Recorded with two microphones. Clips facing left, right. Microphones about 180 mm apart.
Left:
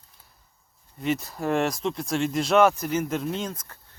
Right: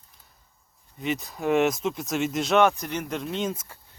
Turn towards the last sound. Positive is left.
turn(degrees=-10)  # may be behind; listen again after turning